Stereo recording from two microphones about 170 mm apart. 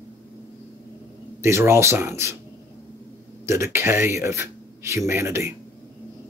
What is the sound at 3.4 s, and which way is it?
Speech, 15° right (ahead or behind).